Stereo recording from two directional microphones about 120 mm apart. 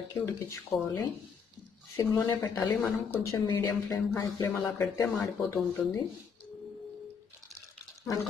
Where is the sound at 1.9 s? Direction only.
30° left (ahead or behind).